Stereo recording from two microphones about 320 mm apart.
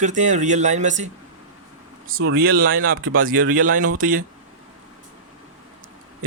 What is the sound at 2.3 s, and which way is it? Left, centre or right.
Speech, right.